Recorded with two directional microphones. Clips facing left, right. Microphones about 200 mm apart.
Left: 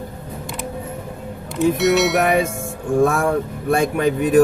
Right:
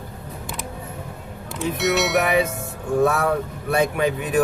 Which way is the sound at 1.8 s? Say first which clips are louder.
Left 1 dB; centre (ahead or behind).